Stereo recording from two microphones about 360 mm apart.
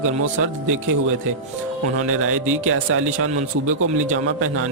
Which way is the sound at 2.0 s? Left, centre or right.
Right.